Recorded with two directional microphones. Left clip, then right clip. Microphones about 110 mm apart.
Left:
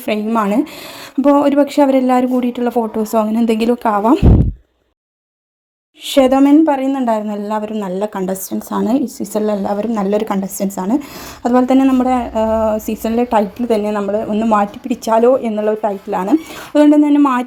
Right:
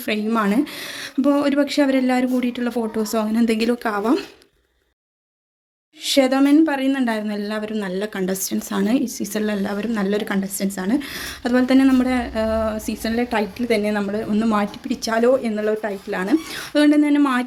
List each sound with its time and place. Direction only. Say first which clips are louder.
0.0 s speech: left 5 dB; 20° left (ahead or behind)
0.3 s a woman's voice: left 4 dB; 10° left (ahead or behind)
6.1 s a woman's voice: left 6 dB; 35° left (ahead or behind)
8.3 s speech: left 3 dB; 10° left (ahead or behind)
8.9 s a woman's voice: left 5 dB; 30° left (ahead or behind)
12.0 s a woman's voice: left 7 dB; 35° left (ahead or behind)
12.8 s a woman's voice: left 6 dB; 45° left (ahead or behind)
13.9 s a woman's voice: left 6 dB; 25° left (ahead or behind)
15.5 s a woman's voice: left 6 dB; 20° left (ahead or behind)
16.0 s a woman's voice: left 2 dB; 30° left (ahead or behind)